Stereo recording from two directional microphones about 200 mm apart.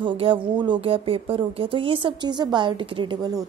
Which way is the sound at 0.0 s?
25° right (ahead or behind).